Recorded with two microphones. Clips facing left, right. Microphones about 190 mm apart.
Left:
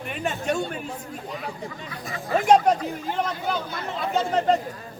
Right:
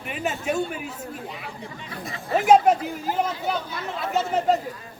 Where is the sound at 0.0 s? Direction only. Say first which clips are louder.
Even; 5° right (ahead or behind).